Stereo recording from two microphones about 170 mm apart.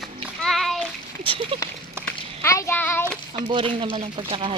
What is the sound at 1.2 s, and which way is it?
Speech, 30° right (ahead or behind).